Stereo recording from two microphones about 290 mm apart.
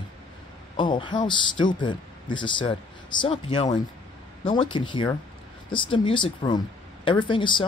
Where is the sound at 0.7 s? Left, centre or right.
Centre.